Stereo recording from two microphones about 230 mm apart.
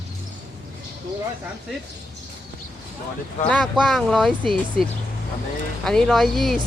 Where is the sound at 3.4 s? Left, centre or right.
Centre.